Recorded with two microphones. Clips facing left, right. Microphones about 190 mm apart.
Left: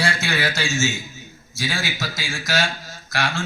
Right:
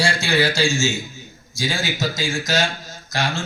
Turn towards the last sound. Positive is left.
turn(degrees=-20)  # may be behind; listen again after turning